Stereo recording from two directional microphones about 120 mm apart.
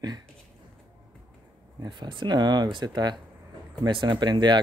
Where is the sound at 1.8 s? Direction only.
40° right (ahead or behind).